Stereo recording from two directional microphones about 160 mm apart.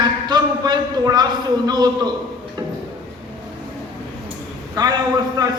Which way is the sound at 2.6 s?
25° right (ahead or behind).